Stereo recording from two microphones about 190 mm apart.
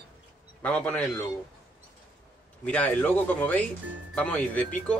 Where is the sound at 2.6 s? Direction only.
5° left (ahead or behind).